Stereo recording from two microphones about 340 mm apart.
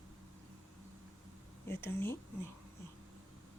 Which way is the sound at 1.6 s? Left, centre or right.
Centre.